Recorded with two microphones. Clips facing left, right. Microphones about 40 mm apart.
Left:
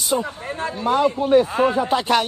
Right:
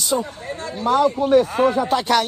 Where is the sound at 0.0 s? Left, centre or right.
Left.